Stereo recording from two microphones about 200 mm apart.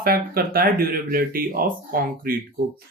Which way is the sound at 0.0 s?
45° right (ahead or behind).